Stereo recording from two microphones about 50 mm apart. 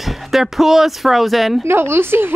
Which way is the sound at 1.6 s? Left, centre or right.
Right.